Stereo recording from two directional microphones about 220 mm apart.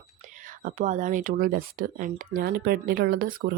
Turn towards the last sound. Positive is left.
turn(degrees=-40)  # may be behind; listen again after turning